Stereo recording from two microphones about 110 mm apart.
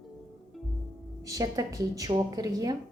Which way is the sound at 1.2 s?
30° right (ahead or behind).